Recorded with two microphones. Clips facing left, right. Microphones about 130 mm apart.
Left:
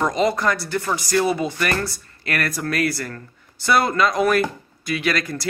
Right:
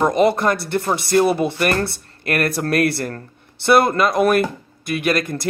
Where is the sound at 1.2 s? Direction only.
60° right (ahead or behind).